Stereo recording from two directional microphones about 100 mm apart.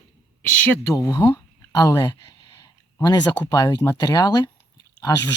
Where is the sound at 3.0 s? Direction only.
45° left (ahead or behind).